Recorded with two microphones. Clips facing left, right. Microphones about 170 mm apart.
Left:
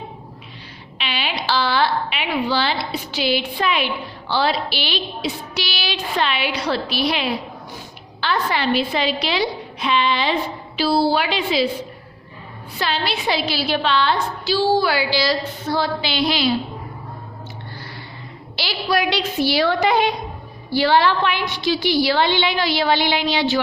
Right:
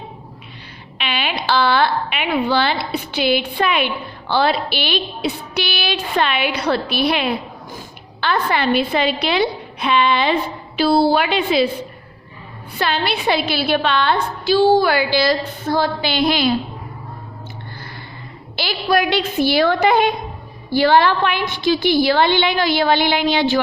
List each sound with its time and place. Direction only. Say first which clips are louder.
0.9 s a woman's voice: right 3 dB; 55° right (ahead or behind)
12.8 s a woman's voice: right 3 dB; 55° right (ahead or behind)
18.5 s a woman's voice: right 3 dB; 50° right (ahead or behind)